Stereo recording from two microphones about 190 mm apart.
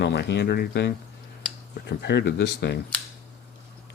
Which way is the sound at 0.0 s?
60° left (ahead or behind).